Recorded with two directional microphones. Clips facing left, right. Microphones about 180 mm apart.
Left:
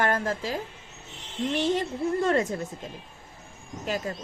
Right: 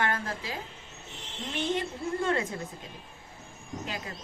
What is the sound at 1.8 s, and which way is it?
Speech, 40° left (ahead or behind).